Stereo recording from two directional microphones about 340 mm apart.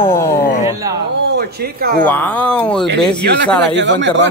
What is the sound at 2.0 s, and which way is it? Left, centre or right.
Speech, centre.